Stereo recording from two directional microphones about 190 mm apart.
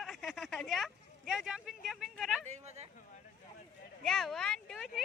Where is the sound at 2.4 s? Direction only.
35° right (ahead or behind).